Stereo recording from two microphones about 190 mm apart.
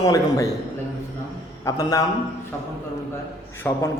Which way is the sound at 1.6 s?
20° left (ahead or behind).